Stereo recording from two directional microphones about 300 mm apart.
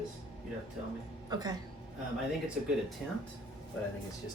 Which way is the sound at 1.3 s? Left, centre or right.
Centre.